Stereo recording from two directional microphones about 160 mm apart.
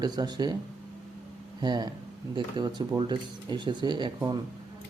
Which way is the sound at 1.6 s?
25° right (ahead or behind).